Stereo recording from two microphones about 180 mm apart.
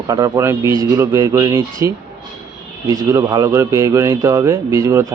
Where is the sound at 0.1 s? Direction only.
15° right (ahead or behind).